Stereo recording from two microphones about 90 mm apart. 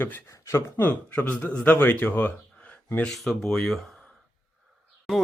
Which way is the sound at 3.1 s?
5° left (ahead or behind).